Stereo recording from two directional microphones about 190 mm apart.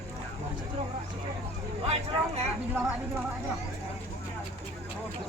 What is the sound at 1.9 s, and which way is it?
Speech, 35° right (ahead or behind).